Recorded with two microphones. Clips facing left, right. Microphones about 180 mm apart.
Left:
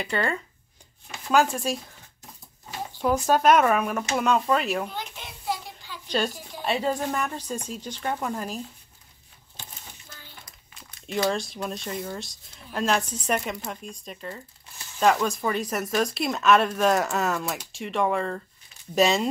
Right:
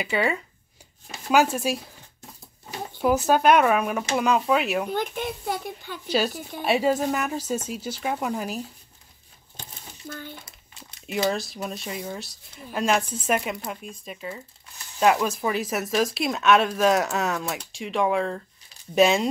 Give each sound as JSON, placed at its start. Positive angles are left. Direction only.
{"t": 0.0, "sound": "speech", "side_deg": -5}
{"t": 3.0, "sound": "speech", "side_deg": -5}
{"t": 4.9, "sound": "a child's voice", "side_deg": -55}
{"t": 6.0, "sound": "speech", "side_deg": -5}
{"t": 10.0, "sound": "a sound", "side_deg": -55}
{"t": 11.1, "sound": "speech", "side_deg": -5}